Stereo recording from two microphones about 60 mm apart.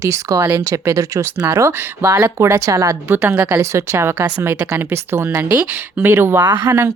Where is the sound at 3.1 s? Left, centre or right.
Right.